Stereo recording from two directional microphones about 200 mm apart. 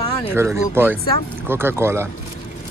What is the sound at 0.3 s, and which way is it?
Speech, 10° right (ahead or behind).